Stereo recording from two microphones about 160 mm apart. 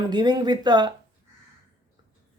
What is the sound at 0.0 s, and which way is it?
Speech, 25° right (ahead or behind).